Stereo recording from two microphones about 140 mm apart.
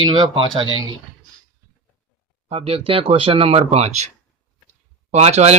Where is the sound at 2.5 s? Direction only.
45° right (ahead or behind).